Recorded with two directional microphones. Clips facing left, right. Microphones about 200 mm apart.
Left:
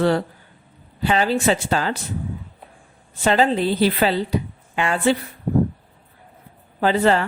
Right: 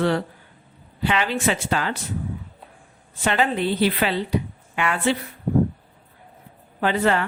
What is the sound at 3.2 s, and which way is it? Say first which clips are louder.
Speech: left 4 dB; 35° left (ahead or behind).